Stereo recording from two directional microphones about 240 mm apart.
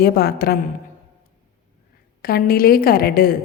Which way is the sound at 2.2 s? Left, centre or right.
Left.